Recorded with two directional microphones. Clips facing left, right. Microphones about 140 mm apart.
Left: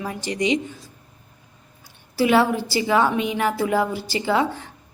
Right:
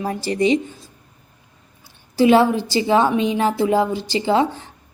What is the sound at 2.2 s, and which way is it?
A woman's voice, 25° right (ahead or behind).